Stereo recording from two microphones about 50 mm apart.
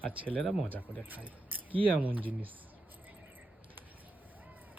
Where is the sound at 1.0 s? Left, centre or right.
Right.